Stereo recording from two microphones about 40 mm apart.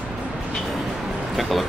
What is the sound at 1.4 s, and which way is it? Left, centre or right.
Speech, centre.